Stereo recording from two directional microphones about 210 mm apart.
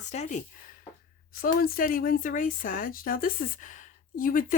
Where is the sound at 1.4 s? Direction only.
45° left (ahead or behind).